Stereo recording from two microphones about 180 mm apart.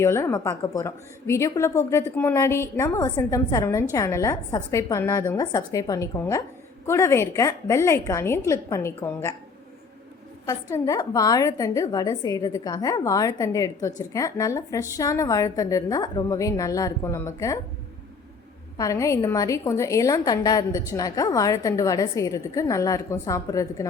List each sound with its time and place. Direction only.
0.0 s a woman's voice: 15° left (ahead or behind)
10.4 s a woman's voice: 20° left (ahead or behind)
18.8 s a woman's voice: 15° left (ahead or behind)